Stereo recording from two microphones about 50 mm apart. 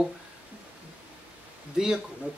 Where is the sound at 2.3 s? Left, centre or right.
Right.